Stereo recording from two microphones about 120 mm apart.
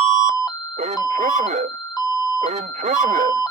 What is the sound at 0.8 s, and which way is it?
Doorbell, 85° right.